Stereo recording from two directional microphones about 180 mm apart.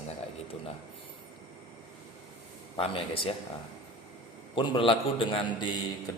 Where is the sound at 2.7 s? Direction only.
30° left (ahead or behind).